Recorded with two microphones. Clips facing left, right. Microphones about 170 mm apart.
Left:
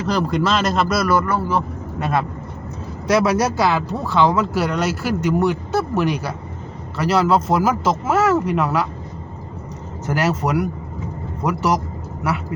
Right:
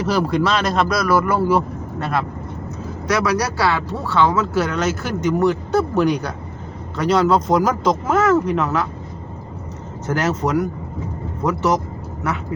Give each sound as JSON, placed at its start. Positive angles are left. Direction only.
{"t": 0.1, "sound": "speech", "side_deg": -5}
{"t": 1.2, "sound": "speech", "side_deg": -10}
{"t": 2.0, "sound": "speech", "side_deg": 15}
{"t": 10.1, "sound": "speech", "side_deg": 10}